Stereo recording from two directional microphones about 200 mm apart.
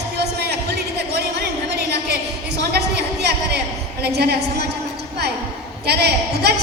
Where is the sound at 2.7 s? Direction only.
55° right (ahead or behind).